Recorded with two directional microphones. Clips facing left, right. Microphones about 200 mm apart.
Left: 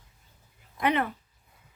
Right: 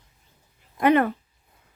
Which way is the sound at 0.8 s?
50° right (ahead or behind).